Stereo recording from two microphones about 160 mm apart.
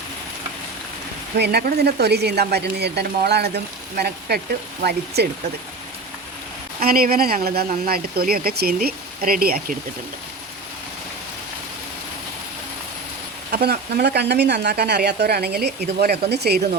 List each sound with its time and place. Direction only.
1.4 s speech: 80° right
6.7 s speech: 65° right (ahead or behind)
13.5 s speech: 80° right